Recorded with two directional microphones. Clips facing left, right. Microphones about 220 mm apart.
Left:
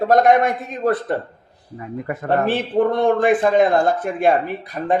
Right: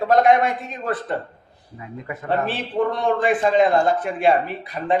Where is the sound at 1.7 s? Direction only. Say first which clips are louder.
Left 6 dB; 50° left (ahead or behind).